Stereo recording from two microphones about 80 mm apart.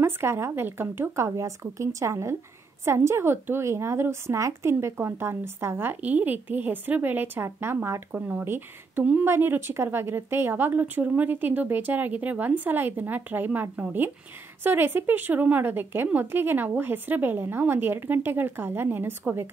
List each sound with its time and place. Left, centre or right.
0.0 s a woman's voice: right